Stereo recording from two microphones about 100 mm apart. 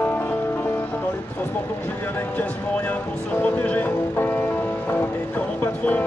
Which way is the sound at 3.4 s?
15° left (ahead or behind).